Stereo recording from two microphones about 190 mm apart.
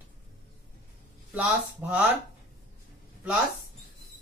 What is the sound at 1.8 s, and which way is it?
Speech, 10° right (ahead or behind).